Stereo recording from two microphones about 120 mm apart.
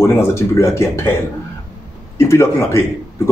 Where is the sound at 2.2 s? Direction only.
20° left (ahead or behind).